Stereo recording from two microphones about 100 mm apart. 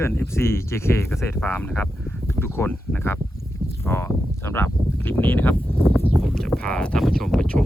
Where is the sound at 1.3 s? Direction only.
15° left (ahead or behind).